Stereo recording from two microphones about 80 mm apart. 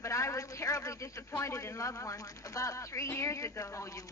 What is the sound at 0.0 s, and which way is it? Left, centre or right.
A man's voice, left.